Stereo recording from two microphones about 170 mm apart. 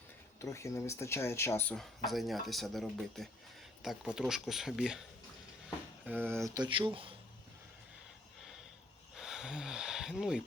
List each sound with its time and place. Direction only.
0.4 s speech: 15° left (ahead or behind)
2.0 s speech: centre (ahead or behind)
6.1 s speech: 10° right (ahead or behind); by 7.1 s 30° right (ahead or behind)
9.1 s a sound: centre (ahead or behind)